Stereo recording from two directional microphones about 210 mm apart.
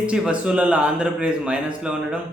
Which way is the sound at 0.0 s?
5° right (ahead or behind).